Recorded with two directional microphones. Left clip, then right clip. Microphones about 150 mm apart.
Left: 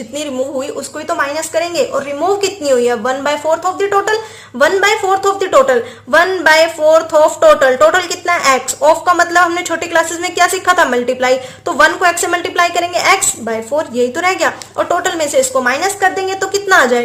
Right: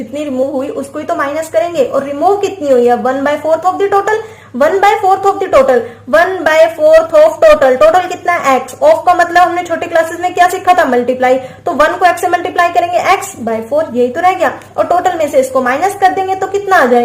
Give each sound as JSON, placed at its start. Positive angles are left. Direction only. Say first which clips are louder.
{"t": 1.0, "sound": "a woman's voice", "louder": "right 1 dB", "side_deg": 25}